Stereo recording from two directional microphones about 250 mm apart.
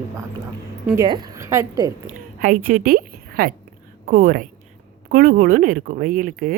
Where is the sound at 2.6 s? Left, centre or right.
Right.